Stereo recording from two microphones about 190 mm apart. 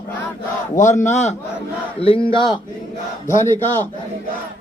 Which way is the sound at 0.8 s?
40° left (ahead or behind).